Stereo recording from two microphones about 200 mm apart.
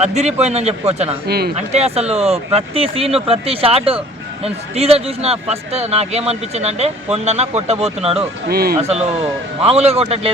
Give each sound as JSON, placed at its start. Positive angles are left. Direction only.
{"t": 0.0, "sound": "a man's voice", "side_deg": -35}
{"t": 8.4, "sound": "speech", "side_deg": -50}
{"t": 8.8, "sound": "a man's voice", "side_deg": -30}